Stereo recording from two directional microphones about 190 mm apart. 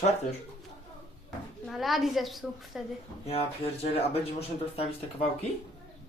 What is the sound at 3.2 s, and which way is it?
Speech, 30° left (ahead or behind).